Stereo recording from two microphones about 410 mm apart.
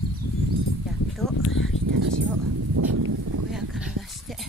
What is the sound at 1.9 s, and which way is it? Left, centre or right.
Speech, right.